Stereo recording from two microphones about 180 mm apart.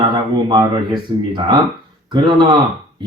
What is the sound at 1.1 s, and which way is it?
Speech, 25° right (ahead or behind).